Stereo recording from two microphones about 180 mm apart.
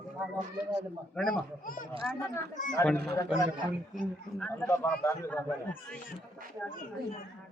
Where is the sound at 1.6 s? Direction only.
50° left (ahead or behind).